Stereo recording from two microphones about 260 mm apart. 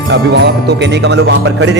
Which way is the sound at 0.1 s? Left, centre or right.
Right.